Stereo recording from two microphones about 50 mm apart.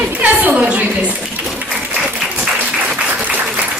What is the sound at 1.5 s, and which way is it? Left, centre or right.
Applause, right.